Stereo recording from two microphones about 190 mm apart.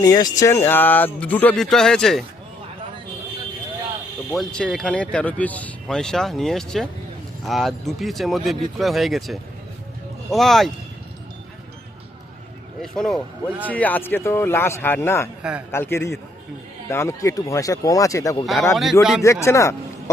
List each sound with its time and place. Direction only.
0.0 s speech: 20° left (ahead or behind); by 2.2 s centre (ahead or behind)
4.3 s speech: centre (ahead or behind)
12.8 s speech: 5° left (ahead or behind)
18.7 s speech: centre (ahead or behind)
19.2 s speech: 15° left (ahead or behind)